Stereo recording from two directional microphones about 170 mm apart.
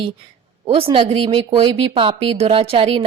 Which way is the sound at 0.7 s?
35° right (ahead or behind).